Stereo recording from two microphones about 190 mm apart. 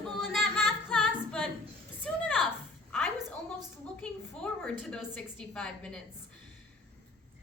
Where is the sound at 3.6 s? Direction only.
5° left (ahead or behind).